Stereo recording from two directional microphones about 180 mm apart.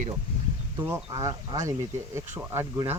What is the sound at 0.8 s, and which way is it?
Speech, 15° right (ahead or behind).